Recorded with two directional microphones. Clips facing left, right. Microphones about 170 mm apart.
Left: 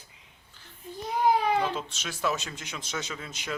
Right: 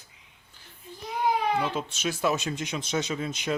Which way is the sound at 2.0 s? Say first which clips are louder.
Right 5 dB; 20° right (ahead or behind).